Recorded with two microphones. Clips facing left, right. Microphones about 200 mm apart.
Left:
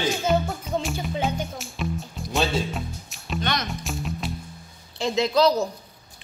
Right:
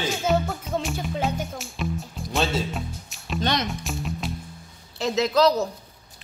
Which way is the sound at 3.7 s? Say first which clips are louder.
Even; centre (ahead or behind).